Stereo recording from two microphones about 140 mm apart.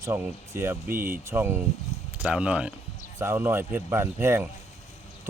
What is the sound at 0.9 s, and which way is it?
Speech, 90° right.